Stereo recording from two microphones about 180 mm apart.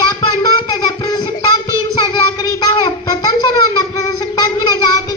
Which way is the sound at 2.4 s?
20° left (ahead or behind).